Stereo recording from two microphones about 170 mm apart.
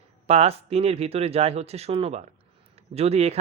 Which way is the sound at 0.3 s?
40° right (ahead or behind).